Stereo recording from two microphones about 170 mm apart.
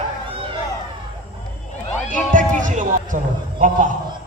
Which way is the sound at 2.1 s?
50° right (ahead or behind).